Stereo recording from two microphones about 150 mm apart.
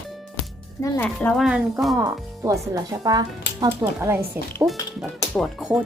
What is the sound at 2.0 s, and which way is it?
Speech, 20° right (ahead or behind).